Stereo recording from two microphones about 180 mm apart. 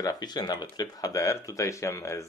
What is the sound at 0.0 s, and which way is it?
Speech, 20° left (ahead or behind).